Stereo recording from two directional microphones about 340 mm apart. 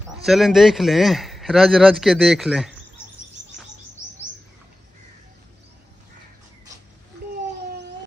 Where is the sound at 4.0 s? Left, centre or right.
Right.